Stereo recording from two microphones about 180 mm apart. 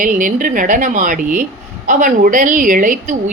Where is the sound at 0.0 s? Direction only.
50° right (ahead or behind).